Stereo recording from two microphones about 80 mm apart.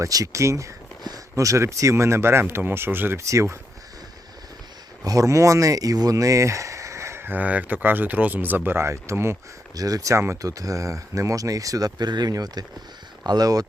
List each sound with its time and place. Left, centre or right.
0.0 s speech: right
3.2 s speech: right
5.0 s speech: right
9.7 s speech: right